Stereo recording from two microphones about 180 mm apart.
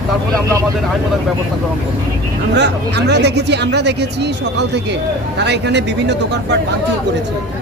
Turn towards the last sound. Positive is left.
turn(degrees=-70)  # may be behind; listen again after turning